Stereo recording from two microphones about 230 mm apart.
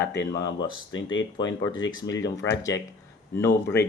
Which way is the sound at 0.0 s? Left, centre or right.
Left.